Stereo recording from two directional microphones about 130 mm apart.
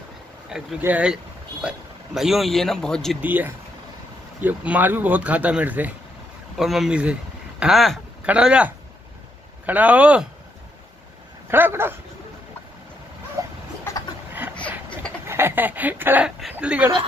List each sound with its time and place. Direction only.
0.5 s speech: 5° right (ahead or behind)
3.2 s speech: 15° right (ahead or behind)
6.5 s speech: centre (ahead or behind)
11.5 s speech: 15° right (ahead or behind)
13.4 s a sound: 25° right (ahead or behind)
13.9 s a sound: 20° left (ahead or behind)
15.2 s speech: 20° right (ahead or behind)